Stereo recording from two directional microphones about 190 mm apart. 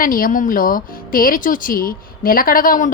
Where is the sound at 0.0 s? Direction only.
50° left (ahead or behind).